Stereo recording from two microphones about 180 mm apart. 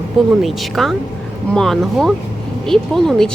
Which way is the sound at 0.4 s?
Centre (ahead or behind).